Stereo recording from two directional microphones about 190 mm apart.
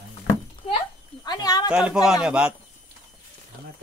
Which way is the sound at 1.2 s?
20° left (ahead or behind).